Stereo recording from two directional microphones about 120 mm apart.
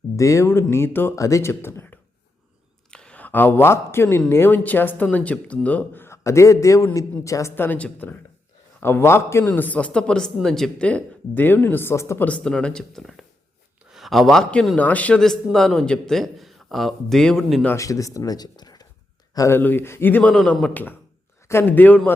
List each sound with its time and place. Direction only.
0.2 s a man's voice: 25° left (ahead or behind)
2.9 s a man's voice: 10° left (ahead or behind)
12.3 s a man's voice: 5° left (ahead or behind)
17.7 s speech: 25° left (ahead or behind)
20.3 s speech: 5° left (ahead or behind)